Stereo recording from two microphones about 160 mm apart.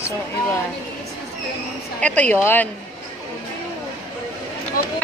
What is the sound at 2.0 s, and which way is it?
Speech, 10° left (ahead or behind).